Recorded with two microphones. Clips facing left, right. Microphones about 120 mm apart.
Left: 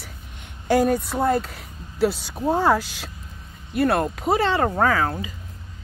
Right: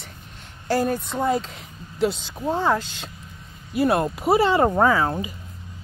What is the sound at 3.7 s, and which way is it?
Speech, 5° right (ahead or behind).